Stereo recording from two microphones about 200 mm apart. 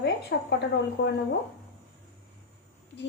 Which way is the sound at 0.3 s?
60° left (ahead or behind).